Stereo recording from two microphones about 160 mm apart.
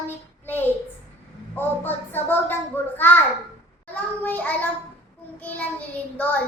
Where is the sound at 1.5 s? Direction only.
10° left (ahead or behind).